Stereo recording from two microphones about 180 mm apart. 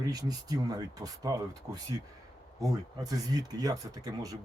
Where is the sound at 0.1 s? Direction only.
20° right (ahead or behind).